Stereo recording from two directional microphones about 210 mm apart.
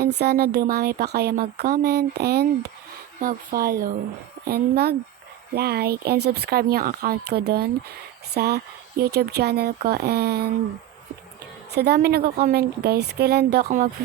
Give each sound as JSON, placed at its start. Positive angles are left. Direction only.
{"t": 0.0, "sound": "speech", "side_deg": -50}
{"t": 11.7, "sound": "speech", "side_deg": -50}
{"t": 13.7, "sound": "speech", "side_deg": -40}